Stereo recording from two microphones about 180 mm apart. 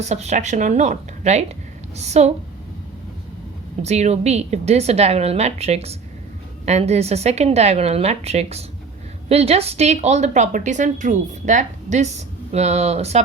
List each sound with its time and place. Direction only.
0.1 s a woman's voice: 40° right (ahead or behind)
3.8 s a woman's voice: 40° right (ahead or behind)